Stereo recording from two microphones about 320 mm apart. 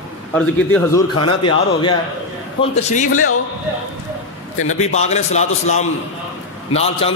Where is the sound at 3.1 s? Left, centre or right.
Left.